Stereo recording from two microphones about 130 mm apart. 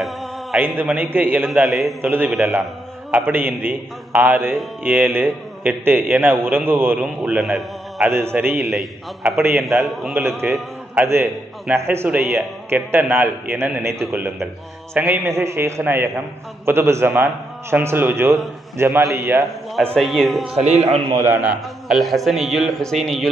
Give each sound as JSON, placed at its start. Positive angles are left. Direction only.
{"t": 0.7, "sound": "a man's voice", "side_deg": -15}
{"t": 1.4, "sound": "speech", "side_deg": 0}
{"t": 2.0, "sound": "a man's voice", "side_deg": -15}
{"t": 2.3, "sound": "speech", "side_deg": -5}
{"t": 3.1, "sound": "a man's voice", "side_deg": -15}
{"t": 8.1, "sound": "a man's voice", "side_deg": -20}
{"t": 8.6, "sound": "speech", "side_deg": 0}
{"t": 9.4, "sound": "a man's voice", "side_deg": -20}
{"t": 20.0, "sound": "speech", "side_deg": 0}
{"t": 20.5, "sound": "a man's voice", "side_deg": -55}
{"t": 21.1, "sound": "a man's voice", "side_deg": -20}
{"t": 21.4, "sound": "speech", "side_deg": -5}